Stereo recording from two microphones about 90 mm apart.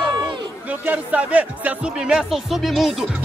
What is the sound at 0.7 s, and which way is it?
Speech, 15° right (ahead or behind).